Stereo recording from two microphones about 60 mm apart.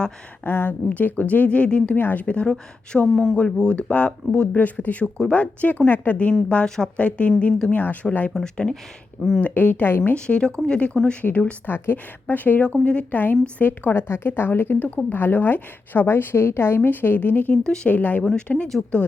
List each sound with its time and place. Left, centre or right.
0.4 s a woman's voice: left
6.7 s speech: centre
6.9 s a woman's voice: left
7.7 s a woman's voice: left
8.3 s speech: centre
9.4 s a woman's voice: left
10.2 s a woman's voice: centre; by 16.9 s left
16.9 s a woman's voice: left
17.5 s speech: centre
17.8 s a woman's voice: left